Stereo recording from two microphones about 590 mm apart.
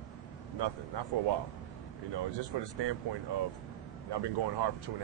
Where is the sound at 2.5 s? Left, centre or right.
Right.